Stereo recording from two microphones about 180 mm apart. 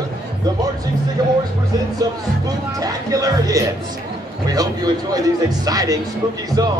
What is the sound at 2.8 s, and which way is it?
Speech, 20° right (ahead or behind).